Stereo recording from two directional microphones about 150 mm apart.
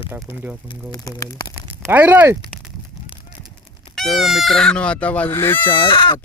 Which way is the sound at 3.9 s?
Centre (ahead or behind).